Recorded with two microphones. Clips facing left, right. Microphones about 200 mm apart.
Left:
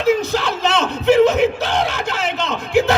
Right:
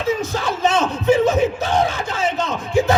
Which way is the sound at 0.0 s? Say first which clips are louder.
Left 4 dB; 70° left (ahead or behind).